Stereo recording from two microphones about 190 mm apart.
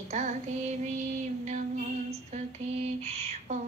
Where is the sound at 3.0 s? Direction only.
35° right (ahead or behind).